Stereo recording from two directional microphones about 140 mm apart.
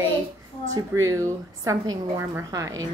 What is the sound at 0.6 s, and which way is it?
A woman's voice, 20° right (ahead or behind).